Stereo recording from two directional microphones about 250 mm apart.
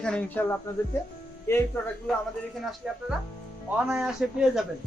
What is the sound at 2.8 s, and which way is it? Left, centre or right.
A man's voice, centre.